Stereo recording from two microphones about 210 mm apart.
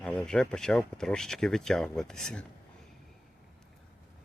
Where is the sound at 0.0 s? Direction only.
5° left (ahead or behind).